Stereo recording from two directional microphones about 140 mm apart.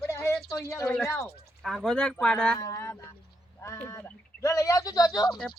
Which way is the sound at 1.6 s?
Centre (ahead or behind).